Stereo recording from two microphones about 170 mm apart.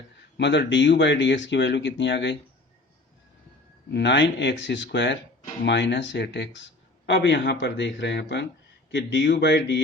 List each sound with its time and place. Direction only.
0.3 s speech: 90° left
3.9 s speech: 90° left